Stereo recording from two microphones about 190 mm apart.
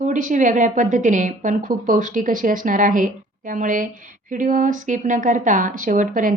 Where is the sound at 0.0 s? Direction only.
40° right (ahead or behind).